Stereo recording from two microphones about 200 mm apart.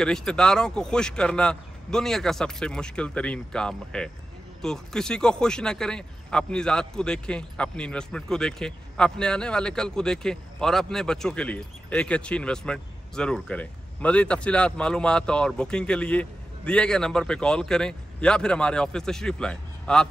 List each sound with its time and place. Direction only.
0.0 s speech: 5° left (ahead or behind)